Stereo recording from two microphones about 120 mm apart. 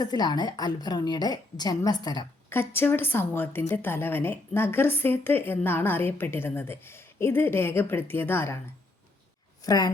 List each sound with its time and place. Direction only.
0.0 s a woman's voice: 35° left (ahead or behind)
2.5 s a woman's voice: 20° left (ahead or behind)
9.6 s a woman's voice: 35° left (ahead or behind)